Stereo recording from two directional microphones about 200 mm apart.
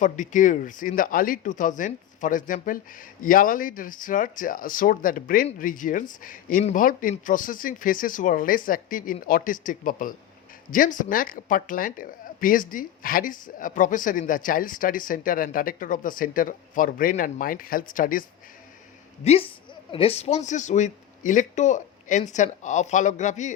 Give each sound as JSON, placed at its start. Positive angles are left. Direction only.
{"t": 0.0, "sound": "speech", "side_deg": 40}
{"t": 19.2, "sound": "a woman's voice", "side_deg": 30}